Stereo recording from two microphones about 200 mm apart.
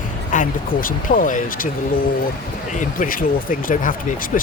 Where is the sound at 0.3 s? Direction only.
40° left (ahead or behind).